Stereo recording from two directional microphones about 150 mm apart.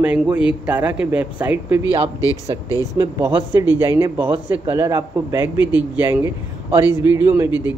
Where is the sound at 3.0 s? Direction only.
15° right (ahead or behind).